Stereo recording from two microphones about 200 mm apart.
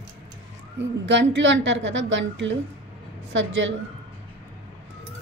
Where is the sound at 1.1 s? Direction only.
65° right (ahead or behind).